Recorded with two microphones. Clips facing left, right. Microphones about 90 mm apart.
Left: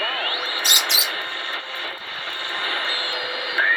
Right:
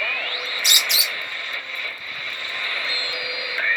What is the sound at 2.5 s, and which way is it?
Radio, 55° left (ahead or behind).